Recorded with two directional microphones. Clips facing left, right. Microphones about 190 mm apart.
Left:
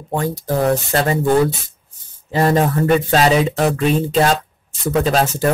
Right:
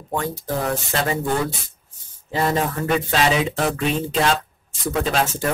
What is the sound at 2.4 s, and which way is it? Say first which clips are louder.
Speech: left 6 dB; 40° left (ahead or behind).